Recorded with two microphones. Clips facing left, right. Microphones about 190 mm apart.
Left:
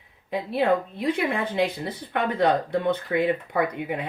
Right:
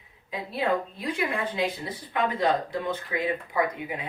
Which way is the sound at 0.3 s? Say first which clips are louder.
Left 5 dB; 65° left (ahead or behind).